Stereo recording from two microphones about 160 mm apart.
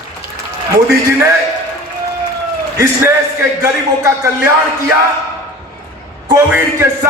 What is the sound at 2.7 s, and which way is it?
A man's voice, 20° right (ahead or behind).